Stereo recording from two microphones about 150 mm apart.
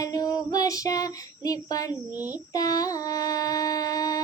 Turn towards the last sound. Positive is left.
turn(degrees=25)  # may be behind; listen again after turning